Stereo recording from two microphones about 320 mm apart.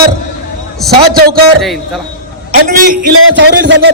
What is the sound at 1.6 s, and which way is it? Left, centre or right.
Speech, centre.